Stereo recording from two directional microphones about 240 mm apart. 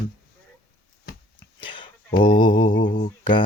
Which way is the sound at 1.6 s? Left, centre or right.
Left.